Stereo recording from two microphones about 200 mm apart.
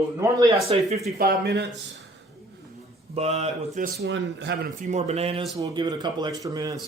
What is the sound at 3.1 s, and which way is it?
Speech, 30° right (ahead or behind).